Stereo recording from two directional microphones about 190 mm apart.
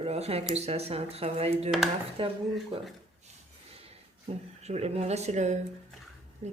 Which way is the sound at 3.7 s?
30° right (ahead or behind).